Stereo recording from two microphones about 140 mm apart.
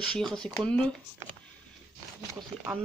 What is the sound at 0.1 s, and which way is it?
Speech, 5° left (ahead or behind).